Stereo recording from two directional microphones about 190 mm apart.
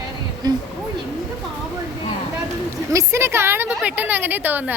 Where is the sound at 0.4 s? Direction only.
20° right (ahead or behind).